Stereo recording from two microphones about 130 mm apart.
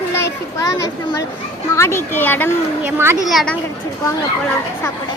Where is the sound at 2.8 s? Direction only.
20° right (ahead or behind).